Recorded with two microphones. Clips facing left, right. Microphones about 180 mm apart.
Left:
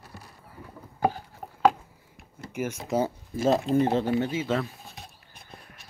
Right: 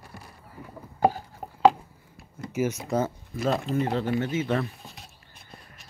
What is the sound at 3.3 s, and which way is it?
Speech, 30° left (ahead or behind).